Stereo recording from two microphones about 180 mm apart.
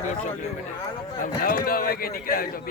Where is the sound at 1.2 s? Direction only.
55° left (ahead or behind).